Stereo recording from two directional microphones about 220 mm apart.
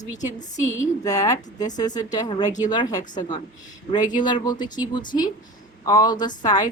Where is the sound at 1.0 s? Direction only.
15° left (ahead or behind).